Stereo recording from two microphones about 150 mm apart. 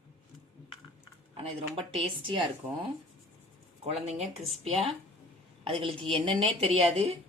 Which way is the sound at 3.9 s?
45° right (ahead or behind).